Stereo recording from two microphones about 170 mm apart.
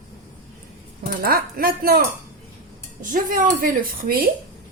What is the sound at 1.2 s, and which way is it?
Speech, 60° right (ahead or behind).